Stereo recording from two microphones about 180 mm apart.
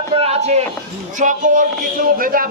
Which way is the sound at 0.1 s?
35° right (ahead or behind).